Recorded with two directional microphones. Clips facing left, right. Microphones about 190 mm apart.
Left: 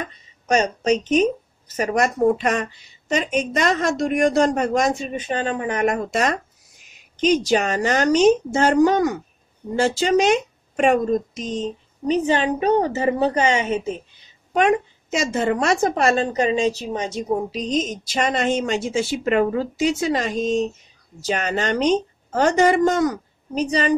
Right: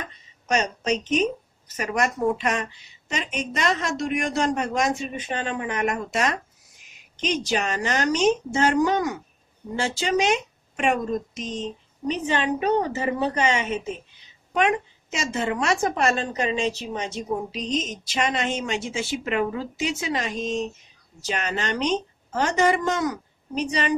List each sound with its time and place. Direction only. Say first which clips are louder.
0.5 s a woman's voice: left 5 dB; 40° left (ahead or behind)